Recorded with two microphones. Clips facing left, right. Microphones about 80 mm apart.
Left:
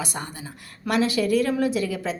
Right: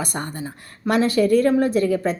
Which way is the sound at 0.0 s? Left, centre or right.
Right.